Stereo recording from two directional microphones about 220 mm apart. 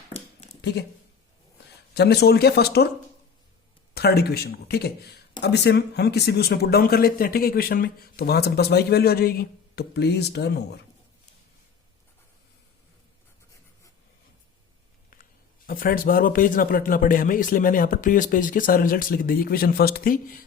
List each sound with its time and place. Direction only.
0.7 s speech: 50° left (ahead or behind)
1.9 s speech: 45° left (ahead or behind)
3.9 s speech: 45° left (ahead or behind)
15.1 s a man's voice: 40° left (ahead or behind)